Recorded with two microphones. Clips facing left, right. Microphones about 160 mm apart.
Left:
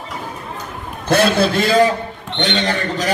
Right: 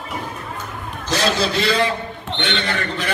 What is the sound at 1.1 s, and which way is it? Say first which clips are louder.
A man's voice: left 6 dB; 55° left (ahead or behind).